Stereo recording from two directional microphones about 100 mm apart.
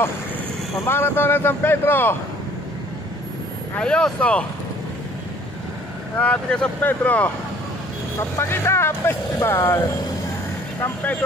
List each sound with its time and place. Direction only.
0.8 s speech: 20° left (ahead or behind)
3.7 s speech: 10° left (ahead or behind)
6.1 s speech: 15° left (ahead or behind)
8.2 s speech: 25° left (ahead or behind)